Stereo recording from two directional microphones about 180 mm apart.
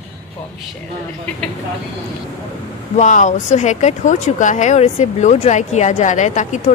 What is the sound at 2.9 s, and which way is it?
Speech, 40° left (ahead or behind).